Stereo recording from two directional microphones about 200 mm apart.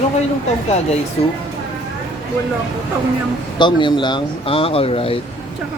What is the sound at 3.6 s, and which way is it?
Speech, 25° left (ahead or behind).